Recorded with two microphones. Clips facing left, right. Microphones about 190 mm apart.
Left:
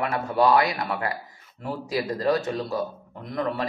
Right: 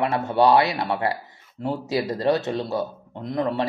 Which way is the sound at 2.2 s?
25° right (ahead or behind).